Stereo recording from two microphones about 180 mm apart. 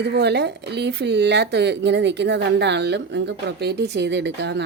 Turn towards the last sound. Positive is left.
turn(degrees=-70)  # may be behind; listen again after turning